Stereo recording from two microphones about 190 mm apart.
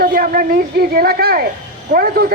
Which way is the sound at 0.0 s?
50° right (ahead or behind).